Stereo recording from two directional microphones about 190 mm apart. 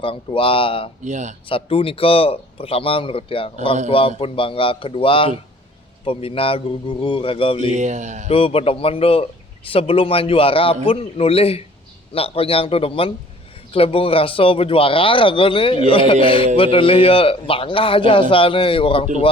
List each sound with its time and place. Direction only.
0.0 s a man's voice: 30° left (ahead or behind)
1.0 s speech: 40° right (ahead or behind)
1.5 s a man's voice: 30° left (ahead or behind)
7.7 s speech: 40° right (ahead or behind)
8.3 s a man's voice: 30° left (ahead or behind)